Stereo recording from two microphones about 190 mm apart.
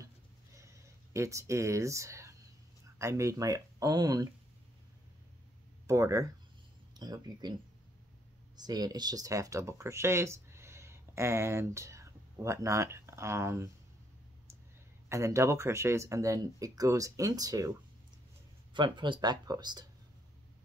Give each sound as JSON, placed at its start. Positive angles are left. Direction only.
{"t": 0.6, "sound": "a sound", "side_deg": -15}
{"t": 3.0, "sound": "speech", "side_deg": -15}
{"t": 5.9, "sound": "speech", "side_deg": -15}
{"t": 8.5, "sound": "speech", "side_deg": -20}
{"t": 15.0, "sound": "speech", "side_deg": -15}